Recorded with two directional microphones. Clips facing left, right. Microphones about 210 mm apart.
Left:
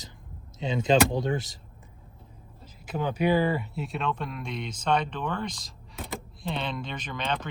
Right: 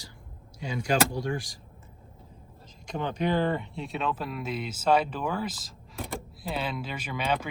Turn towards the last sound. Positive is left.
turn(degrees=-10)  # may be behind; listen again after turning